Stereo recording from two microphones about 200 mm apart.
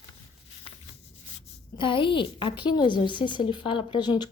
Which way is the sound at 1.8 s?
25° left (ahead or behind).